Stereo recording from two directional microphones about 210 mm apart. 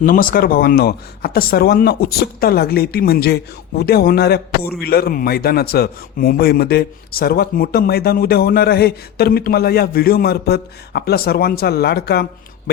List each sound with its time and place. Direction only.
0.0 s a man's voice: 40° left (ahead or behind)